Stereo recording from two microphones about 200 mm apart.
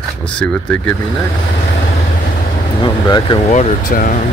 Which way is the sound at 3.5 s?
40° left (ahead or behind).